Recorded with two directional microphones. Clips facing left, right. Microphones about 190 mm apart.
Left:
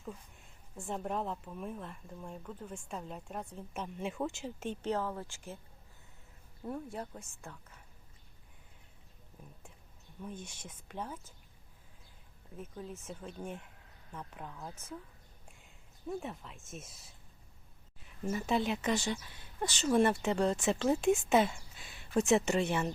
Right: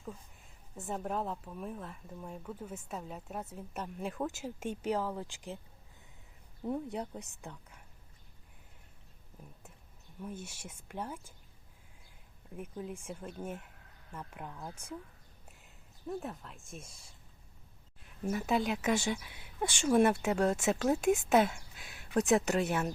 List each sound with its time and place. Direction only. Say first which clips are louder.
0.0 s speech: even; centre (ahead or behind)
4.4 s speech: right 1 dB; 10° right (ahead or behind)
6.7 s speech: right 4 dB; 20° right (ahead or behind)
10.2 s speech: right 1 dB; 5° right (ahead or behind)
12.5 s speech: right 3 dB; 10° right (ahead or behind)
15.4 s speech: right 2 dB; centre (ahead or behind)
18.3 s speech: right 1 dB; 5° right (ahead or behind)